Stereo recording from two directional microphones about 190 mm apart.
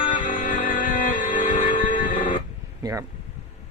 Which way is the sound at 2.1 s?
25° left (ahead or behind).